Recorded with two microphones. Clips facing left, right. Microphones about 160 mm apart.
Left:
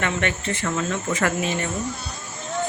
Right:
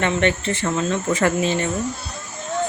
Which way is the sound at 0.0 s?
30° right (ahead or behind).